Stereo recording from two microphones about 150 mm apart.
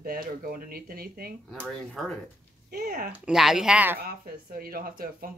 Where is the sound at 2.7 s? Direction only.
75° right (ahead or behind).